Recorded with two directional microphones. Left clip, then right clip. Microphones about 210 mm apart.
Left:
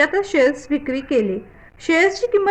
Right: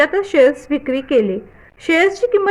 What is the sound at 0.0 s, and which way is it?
A woman's voice, 30° right (ahead or behind).